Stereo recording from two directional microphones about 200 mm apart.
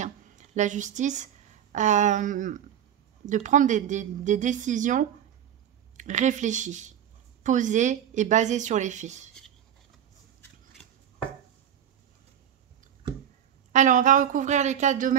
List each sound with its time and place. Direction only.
0.0 s a woman's voice: 35° right (ahead or behind)
13.7 s a woman's voice: 40° right (ahead or behind)